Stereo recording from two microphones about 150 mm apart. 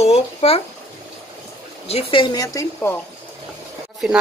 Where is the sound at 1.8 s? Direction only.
40° left (ahead or behind); by 2.9 s 20° left (ahead or behind).